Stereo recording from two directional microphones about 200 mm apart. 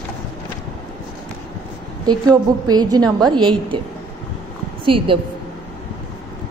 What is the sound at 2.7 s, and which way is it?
A woman's voice, 20° right (ahead or behind).